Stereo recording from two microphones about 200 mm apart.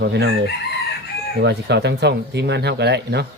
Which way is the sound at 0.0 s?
60° right (ahead or behind).